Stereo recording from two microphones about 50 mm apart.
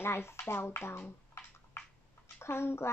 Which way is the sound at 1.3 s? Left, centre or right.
Left.